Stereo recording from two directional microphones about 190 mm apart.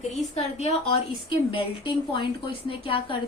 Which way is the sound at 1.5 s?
25° left (ahead or behind).